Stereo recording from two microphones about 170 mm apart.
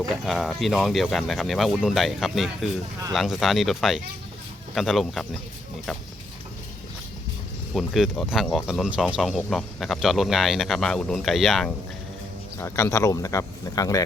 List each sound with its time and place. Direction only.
0.3 s speech: centre (ahead or behind)
7.7 s speech: centre (ahead or behind)
12.5 s speech: 15° left (ahead or behind)